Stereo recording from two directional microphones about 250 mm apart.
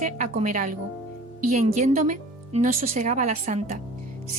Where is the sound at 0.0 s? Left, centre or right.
Right.